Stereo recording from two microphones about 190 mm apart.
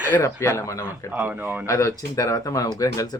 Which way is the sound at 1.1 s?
10° right (ahead or behind).